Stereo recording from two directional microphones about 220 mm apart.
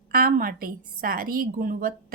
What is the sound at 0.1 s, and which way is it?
Speech, 40° right (ahead or behind).